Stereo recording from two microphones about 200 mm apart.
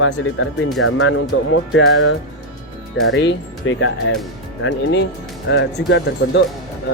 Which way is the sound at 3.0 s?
60° left (ahead or behind).